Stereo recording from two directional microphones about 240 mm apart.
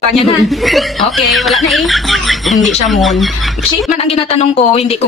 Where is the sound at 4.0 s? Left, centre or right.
Left.